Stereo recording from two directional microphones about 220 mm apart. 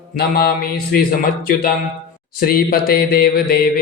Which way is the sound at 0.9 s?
40° left (ahead or behind).